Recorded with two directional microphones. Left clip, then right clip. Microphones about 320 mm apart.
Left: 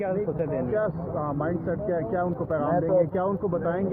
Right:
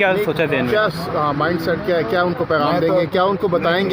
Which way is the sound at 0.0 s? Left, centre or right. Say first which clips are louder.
Right 11 dB; right.